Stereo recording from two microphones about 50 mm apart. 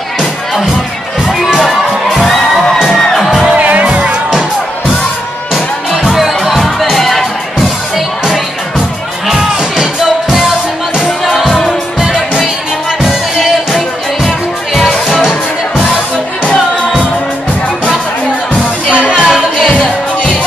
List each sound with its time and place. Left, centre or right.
1.2 s crowd: centre
3.0 s music: centre
3.5 s music: right
3.8 s music: centre
5.9 s music: centre
9.3 s music: centre
11.2 s music: centre
13.0 s music: centre
18.5 s music: left
19.2 s music: centre
19.7 s music: left